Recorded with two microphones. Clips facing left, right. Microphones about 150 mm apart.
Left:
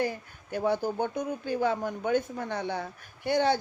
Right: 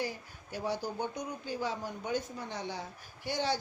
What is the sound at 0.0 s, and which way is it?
Speech, 55° left (ahead or behind).